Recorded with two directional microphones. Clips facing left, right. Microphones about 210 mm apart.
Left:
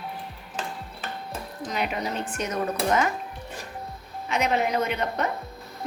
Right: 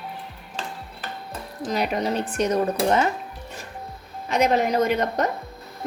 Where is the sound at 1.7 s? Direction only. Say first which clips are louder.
Right 5 dB; 40° right (ahead or behind).